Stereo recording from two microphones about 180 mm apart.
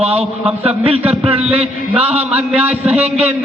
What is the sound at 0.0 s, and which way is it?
Speech, 35° right (ahead or behind).